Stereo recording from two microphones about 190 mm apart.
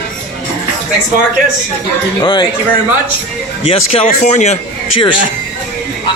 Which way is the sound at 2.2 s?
25° left (ahead or behind).